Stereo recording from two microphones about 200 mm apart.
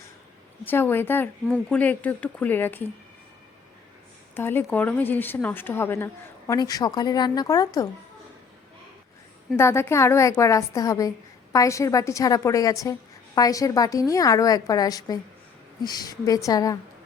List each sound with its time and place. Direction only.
0.6 s a woman's voice: 10° left (ahead or behind)
4.4 s a woman's voice: 10° left (ahead or behind)
9.6 s a woman's voice: 10° left (ahead or behind)